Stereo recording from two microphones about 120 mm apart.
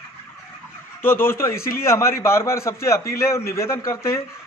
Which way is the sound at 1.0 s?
20° left (ahead or behind).